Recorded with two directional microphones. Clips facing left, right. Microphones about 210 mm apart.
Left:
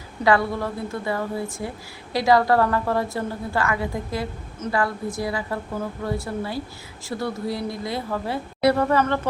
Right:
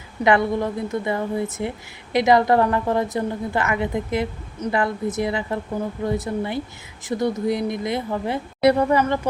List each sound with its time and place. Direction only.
0.3 s a woman's voice: 20° right (ahead or behind)